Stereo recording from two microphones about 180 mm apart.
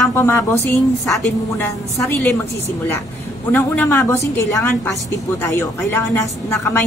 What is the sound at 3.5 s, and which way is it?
A woman's voice, 10° left (ahead or behind).